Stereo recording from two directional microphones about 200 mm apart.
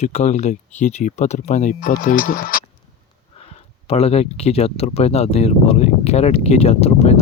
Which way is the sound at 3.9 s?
30° left (ahead or behind).